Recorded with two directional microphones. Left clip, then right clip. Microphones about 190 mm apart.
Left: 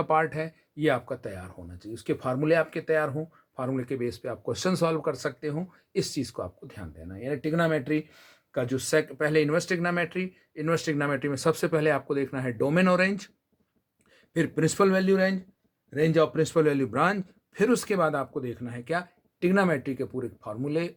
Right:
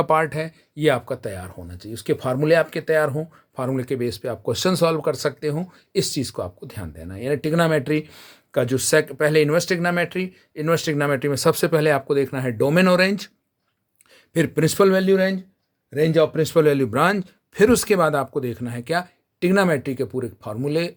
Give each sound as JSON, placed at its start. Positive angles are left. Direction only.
{"t": 0.0, "sound": "speech", "side_deg": -30}